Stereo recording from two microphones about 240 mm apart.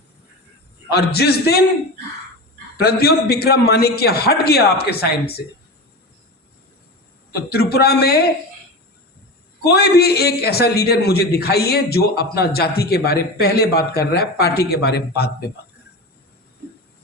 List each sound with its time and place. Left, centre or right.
0.9 s a man's voice: left
2.7 s a man's voice: left
7.3 s a man's voice: left
9.6 s a man's voice: left